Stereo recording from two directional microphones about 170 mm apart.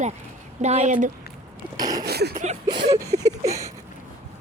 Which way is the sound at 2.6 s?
25° right (ahead or behind).